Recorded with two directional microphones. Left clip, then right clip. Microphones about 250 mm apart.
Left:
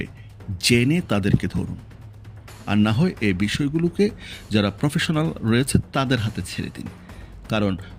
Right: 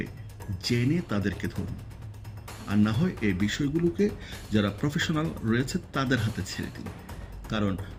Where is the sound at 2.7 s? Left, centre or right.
Left.